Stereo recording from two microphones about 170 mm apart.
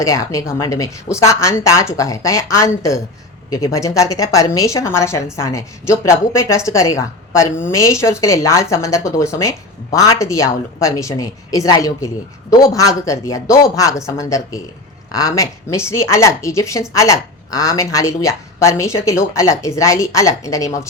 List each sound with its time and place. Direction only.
0.0 s speech: 20° left (ahead or behind)